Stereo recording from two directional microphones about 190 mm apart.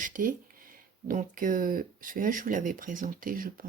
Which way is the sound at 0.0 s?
45° right (ahead or behind).